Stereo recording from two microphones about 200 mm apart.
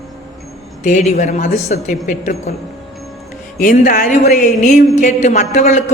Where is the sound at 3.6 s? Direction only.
40° left (ahead or behind).